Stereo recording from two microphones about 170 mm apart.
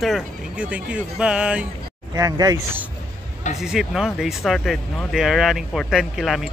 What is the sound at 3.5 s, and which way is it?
Speech, centre (ahead or behind).